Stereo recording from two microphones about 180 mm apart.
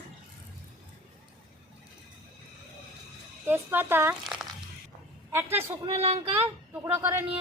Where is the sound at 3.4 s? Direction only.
10° right (ahead or behind).